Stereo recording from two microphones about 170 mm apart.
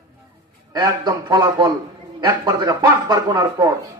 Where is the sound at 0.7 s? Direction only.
25° right (ahead or behind).